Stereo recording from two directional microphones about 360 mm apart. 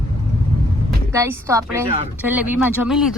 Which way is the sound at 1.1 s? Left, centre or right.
Centre.